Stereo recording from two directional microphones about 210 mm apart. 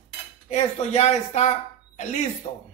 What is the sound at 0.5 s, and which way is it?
Speech, 30° left (ahead or behind).